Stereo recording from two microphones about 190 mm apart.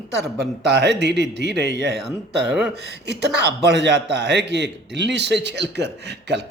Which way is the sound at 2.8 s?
65° right (ahead or behind).